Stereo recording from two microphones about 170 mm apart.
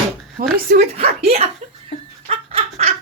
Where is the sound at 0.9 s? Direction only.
35° right (ahead or behind).